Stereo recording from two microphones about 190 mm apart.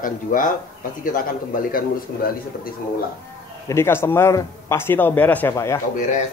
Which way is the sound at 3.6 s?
15° left (ahead or behind).